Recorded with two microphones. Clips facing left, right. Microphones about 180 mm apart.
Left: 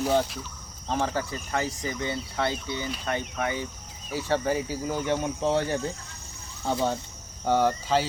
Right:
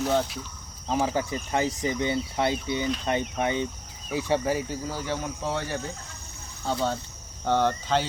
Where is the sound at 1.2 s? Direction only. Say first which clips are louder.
Right 3 dB; 15° right (ahead or behind).